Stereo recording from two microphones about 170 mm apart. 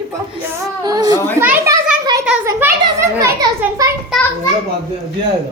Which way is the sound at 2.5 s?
15° right (ahead or behind).